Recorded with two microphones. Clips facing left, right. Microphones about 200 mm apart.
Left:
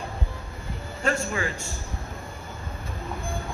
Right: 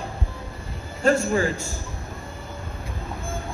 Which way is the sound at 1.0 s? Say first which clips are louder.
Right 7 dB; 35° right (ahead or behind).